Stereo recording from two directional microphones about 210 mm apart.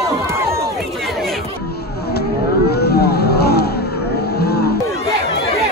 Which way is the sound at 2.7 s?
50° left (ahead or behind).